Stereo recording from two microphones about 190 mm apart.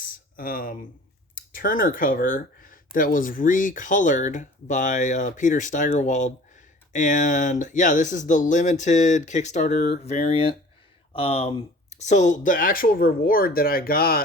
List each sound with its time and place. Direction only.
0.3 s speech: 45° left (ahead or behind)